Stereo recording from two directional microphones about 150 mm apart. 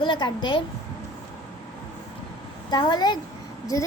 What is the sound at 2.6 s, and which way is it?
Speech, 30° left (ahead or behind).